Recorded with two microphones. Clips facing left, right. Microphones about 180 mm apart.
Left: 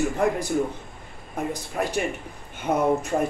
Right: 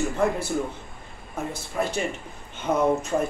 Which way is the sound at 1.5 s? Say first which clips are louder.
Right 1 dB; 15° left (ahead or behind).